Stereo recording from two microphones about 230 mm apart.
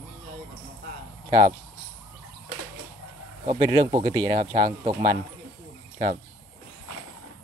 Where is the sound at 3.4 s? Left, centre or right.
Right.